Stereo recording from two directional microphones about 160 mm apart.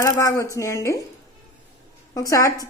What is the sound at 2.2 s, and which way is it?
Speech, 20° left (ahead or behind).